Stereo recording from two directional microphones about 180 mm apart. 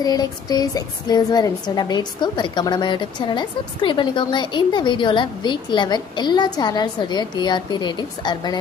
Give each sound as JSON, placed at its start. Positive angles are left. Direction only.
{"t": 0.0, "sound": "a woman's voice", "side_deg": 20}